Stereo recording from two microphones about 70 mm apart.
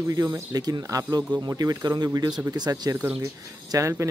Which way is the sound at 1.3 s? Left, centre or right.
Right.